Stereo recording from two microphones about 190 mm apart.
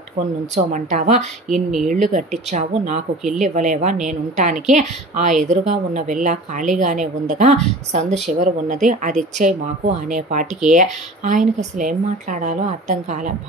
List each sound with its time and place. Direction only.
0.6 s a woman's voice: 40° right (ahead or behind)